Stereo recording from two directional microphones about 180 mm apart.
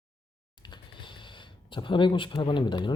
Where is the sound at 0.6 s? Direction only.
25° left (ahead or behind).